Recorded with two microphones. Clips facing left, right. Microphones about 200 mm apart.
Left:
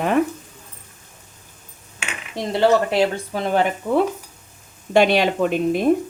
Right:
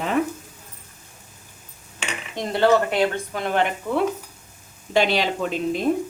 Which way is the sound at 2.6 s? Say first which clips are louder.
Left 2 dB; 30° left (ahead or behind).